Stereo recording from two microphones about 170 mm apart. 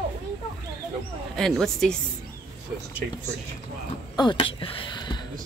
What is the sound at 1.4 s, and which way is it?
Speech, centre (ahead or behind).